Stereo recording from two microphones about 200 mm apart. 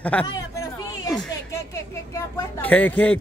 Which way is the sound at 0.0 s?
5° left (ahead or behind).